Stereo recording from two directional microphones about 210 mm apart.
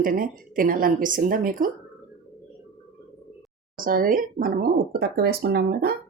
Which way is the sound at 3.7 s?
40° right (ahead or behind).